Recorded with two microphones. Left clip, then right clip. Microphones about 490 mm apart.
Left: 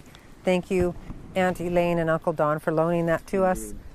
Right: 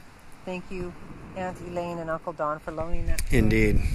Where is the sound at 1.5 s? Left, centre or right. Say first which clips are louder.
Left 8 dB; left.